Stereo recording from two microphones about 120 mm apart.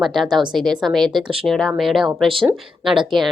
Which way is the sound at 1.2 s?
50° right (ahead or behind).